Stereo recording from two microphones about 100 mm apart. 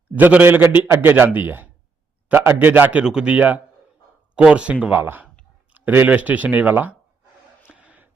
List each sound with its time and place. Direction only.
0.2 s a man's voice: 15° right (ahead or behind)
3.0 s speech: 10° right (ahead or behind)
7.6 s a sound: 15° right (ahead or behind)